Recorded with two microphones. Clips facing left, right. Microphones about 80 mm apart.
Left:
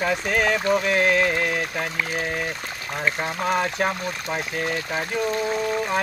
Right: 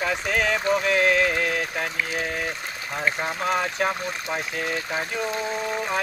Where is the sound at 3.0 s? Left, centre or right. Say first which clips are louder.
Left 1 dB; centre.